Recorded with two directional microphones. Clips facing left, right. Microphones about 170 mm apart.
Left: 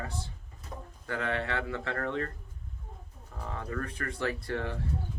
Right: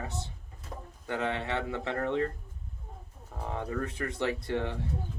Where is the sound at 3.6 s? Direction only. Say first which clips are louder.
Right 3 dB; 25° right (ahead or behind).